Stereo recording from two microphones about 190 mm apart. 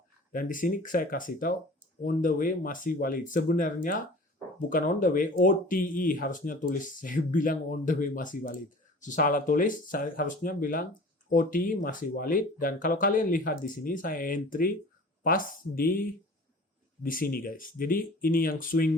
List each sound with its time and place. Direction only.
0.3 s speech: 45° left (ahead or behind)